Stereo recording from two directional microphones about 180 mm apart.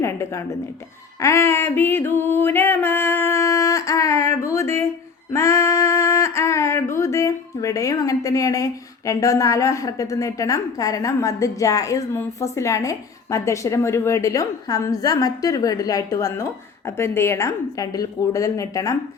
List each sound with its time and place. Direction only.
0.0 s a sound: 15° left (ahead or behind)
5.3 s female singing: 15° left (ahead or behind)
6.9 s a woman's voice: 15° left (ahead or behind)